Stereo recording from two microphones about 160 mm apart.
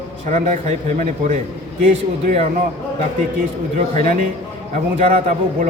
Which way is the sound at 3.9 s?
55° right (ahead or behind).